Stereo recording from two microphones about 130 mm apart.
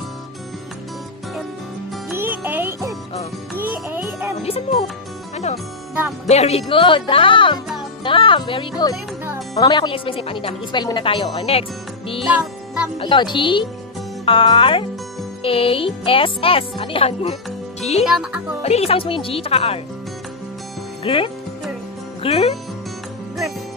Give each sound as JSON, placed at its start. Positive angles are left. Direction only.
{"t": 2.1, "sound": "music", "side_deg": -15}
{"t": 4.4, "sound": "music", "side_deg": 50}
{"t": 6.2, "sound": "a woman's voice", "side_deg": 55}
{"t": 12.2, "sound": "music", "side_deg": -5}
{"t": 13.0, "sound": "a woman's voice", "side_deg": 35}
{"t": 18.0, "sound": "speech", "side_deg": -5}
{"t": 18.6, "sound": "speech", "side_deg": 50}
{"t": 21.0, "sound": "speech", "side_deg": 45}